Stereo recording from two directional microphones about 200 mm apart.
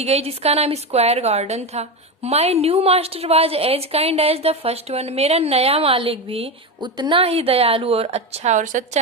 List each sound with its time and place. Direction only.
0.0 s a woman's voice: 30° right (ahead or behind)